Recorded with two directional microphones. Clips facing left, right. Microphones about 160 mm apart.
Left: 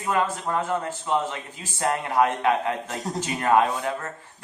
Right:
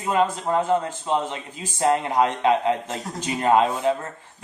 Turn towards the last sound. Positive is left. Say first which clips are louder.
# right 2 dB
turn(degrees=-20)  # may be behind; listen again after turning